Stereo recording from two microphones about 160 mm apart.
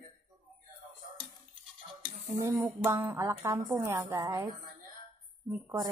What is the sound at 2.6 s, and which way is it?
A woman's voice, 15° right (ahead or behind).